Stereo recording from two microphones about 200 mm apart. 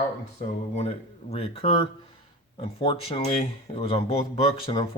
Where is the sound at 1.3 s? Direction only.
30° left (ahead or behind).